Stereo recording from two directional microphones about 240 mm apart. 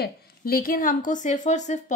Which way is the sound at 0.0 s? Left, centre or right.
Left.